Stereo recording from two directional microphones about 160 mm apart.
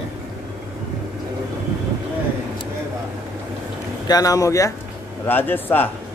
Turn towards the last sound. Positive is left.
turn(degrees=10)  # may be behind; listen again after turning